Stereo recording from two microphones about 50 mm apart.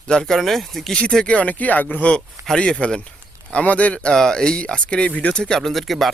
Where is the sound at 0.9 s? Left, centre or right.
Centre.